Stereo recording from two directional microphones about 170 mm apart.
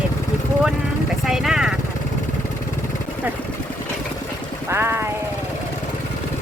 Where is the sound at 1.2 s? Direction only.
Centre (ahead or behind).